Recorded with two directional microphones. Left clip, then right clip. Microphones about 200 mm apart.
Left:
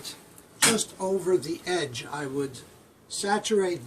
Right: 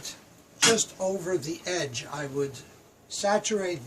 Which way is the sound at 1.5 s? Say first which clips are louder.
Left 2 dB; 15° right (ahead or behind).